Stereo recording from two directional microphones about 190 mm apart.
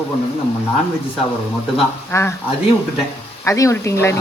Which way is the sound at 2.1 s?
15° left (ahead or behind).